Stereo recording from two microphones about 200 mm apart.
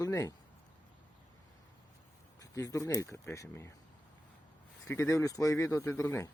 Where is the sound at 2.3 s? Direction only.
15° left (ahead or behind).